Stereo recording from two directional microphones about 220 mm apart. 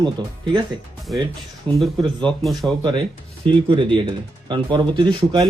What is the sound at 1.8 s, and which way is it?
Speech, centre (ahead or behind).